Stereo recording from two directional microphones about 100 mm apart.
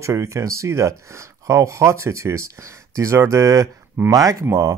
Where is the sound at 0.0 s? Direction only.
30° right (ahead or behind).